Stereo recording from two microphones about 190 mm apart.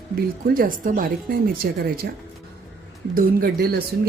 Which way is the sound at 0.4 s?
50° right (ahead or behind).